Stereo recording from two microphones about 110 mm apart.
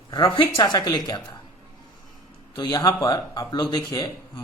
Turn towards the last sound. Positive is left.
turn(degrees=35)  # may be behind; listen again after turning